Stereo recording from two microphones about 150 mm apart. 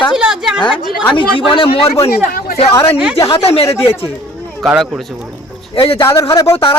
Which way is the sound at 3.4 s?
40° left (ahead or behind).